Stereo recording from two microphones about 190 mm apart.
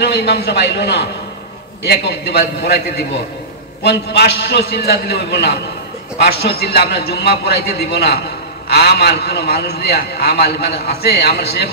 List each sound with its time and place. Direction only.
0.0 s a man's voice: 60° left (ahead or behind)
3.8 s a man's voice: 60° left (ahead or behind)